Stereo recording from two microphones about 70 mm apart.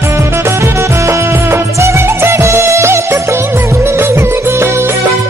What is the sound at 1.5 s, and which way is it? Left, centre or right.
Music, right.